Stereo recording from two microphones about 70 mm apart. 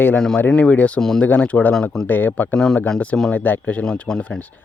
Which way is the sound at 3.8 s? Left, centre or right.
Centre.